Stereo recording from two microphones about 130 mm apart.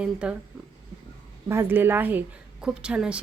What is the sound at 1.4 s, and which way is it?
A woman's voice, 20° right (ahead or behind).